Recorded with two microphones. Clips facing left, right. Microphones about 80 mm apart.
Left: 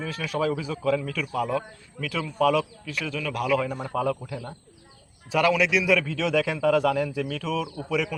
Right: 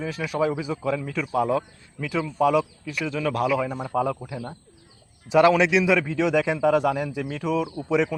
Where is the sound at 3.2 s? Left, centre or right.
Right.